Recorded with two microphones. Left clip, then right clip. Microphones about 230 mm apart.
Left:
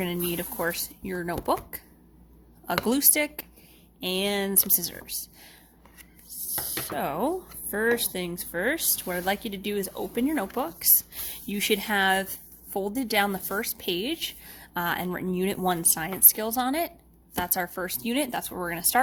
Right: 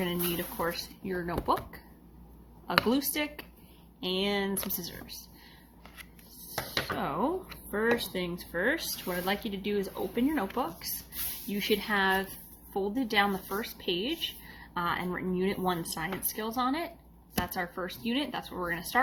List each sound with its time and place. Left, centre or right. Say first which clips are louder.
0.0 s speech: left 2 dB; left
2.8 s a woman's voice: left 4 dB; left
6.9 s a woman's voice: left 5 dB; left